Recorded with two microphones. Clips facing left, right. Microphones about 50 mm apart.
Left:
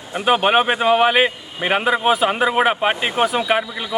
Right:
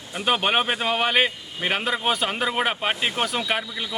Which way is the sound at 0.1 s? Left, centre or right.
Centre.